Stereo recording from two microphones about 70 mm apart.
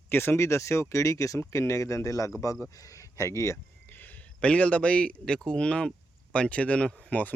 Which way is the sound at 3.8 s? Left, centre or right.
Left.